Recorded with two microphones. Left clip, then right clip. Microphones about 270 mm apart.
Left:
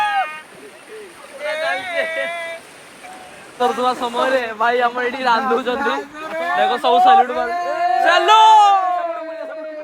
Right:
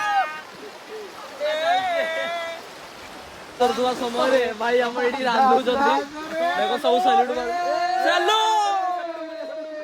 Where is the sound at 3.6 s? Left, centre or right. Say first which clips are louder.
Left 3 dB; left.